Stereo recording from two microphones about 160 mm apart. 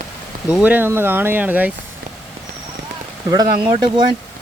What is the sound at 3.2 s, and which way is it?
Speech, 25° right (ahead or behind).